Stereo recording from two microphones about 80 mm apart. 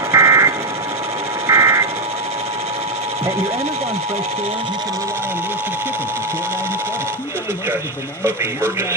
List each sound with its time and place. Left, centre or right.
0.1 s vehicle: right
1.5 s a sound: right
8.2 s a man's voice: right